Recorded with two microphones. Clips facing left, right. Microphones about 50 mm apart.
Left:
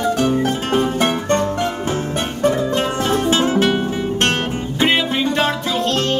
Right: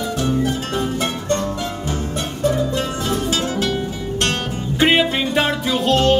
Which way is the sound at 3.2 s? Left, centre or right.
Left.